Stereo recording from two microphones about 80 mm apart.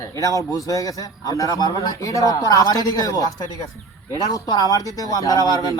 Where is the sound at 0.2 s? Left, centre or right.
Left.